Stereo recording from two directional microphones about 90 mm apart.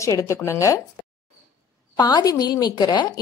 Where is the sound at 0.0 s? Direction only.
35° left (ahead or behind).